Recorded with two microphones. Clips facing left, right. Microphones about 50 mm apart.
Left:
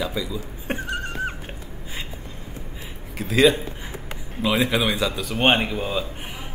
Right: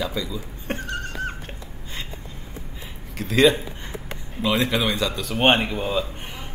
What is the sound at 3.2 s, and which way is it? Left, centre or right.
Speech, centre.